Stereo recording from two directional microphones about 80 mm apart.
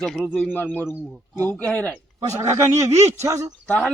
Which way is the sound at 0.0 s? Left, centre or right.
Centre.